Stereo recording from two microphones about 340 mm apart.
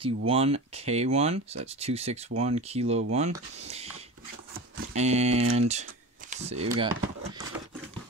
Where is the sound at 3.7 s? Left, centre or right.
Centre.